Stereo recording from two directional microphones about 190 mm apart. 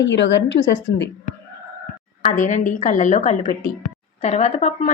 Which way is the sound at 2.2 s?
40° left (ahead or behind).